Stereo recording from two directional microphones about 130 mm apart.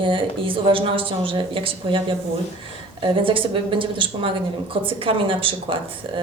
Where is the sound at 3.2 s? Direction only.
40° right (ahead or behind).